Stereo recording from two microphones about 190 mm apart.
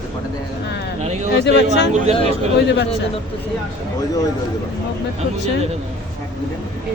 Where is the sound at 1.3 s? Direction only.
65° left (ahead or behind).